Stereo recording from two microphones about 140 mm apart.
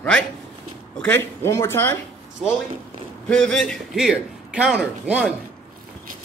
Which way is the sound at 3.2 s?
5° left (ahead or behind).